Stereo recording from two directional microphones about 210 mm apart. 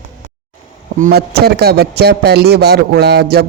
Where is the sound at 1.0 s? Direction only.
50° right (ahead or behind).